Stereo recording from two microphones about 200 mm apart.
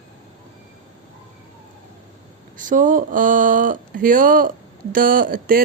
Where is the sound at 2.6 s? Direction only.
40° right (ahead or behind).